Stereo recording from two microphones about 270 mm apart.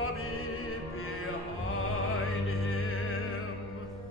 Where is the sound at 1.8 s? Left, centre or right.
Left.